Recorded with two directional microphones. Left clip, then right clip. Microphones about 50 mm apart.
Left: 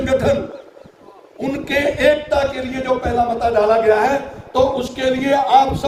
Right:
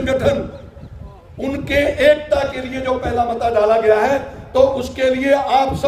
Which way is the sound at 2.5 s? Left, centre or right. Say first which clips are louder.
Left 1 dB; right.